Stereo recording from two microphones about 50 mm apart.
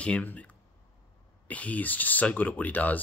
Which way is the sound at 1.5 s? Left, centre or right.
Left.